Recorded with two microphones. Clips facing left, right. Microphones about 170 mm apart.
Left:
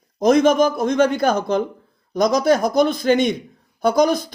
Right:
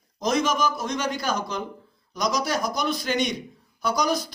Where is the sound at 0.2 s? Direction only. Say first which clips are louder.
Left 9 dB; 55° left (ahead or behind).